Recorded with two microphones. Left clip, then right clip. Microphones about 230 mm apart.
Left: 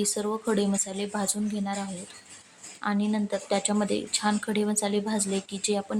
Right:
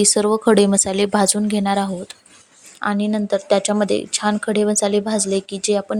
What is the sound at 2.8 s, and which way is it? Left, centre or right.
Speech, right.